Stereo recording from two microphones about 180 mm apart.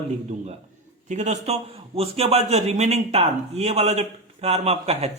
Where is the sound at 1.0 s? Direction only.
40° right (ahead or behind).